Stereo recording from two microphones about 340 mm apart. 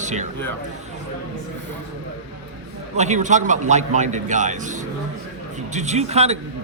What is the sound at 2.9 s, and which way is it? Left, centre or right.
A man's voice, centre.